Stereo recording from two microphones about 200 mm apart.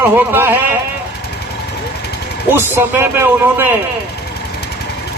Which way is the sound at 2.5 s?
10° right (ahead or behind).